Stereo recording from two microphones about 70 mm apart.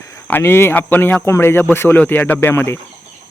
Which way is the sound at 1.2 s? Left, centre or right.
Left.